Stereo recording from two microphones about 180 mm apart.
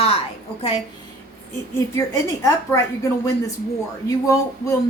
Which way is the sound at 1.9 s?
15° left (ahead or behind).